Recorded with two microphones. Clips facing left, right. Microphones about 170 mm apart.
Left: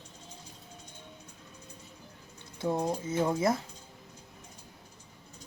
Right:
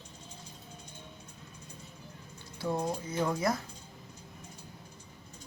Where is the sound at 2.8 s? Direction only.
25° left (ahead or behind).